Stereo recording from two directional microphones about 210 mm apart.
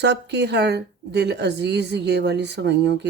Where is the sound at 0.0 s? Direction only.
55° right (ahead or behind).